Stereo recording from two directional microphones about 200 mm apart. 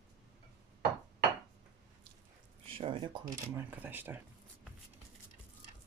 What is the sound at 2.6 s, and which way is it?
Speech, 25° right (ahead or behind).